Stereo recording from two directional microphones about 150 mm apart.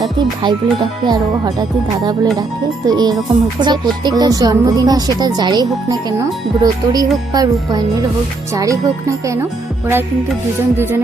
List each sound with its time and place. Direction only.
0.0 s music: 30° right (ahead or behind)
2.8 s music: 25° right (ahead or behind)